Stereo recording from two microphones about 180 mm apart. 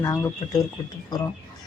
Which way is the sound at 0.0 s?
20° left (ahead or behind).